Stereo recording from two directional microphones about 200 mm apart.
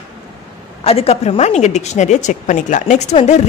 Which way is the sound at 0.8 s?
30° left (ahead or behind).